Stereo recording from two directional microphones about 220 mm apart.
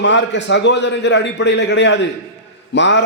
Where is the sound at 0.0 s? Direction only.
55° left (ahead or behind).